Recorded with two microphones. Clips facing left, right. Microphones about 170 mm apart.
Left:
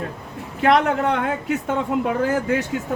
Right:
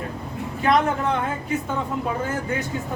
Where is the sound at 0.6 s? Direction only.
75° left (ahead or behind).